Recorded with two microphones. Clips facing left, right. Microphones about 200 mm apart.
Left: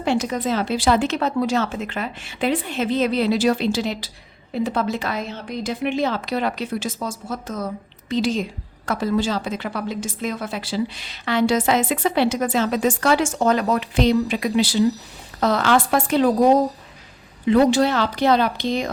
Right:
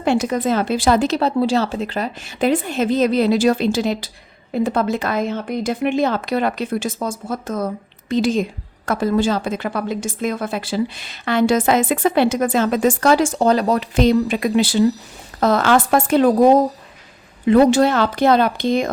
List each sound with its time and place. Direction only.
0.0 s a woman's voice: 50° right (ahead or behind)
17.4 s a woman's voice: 50° right (ahead or behind)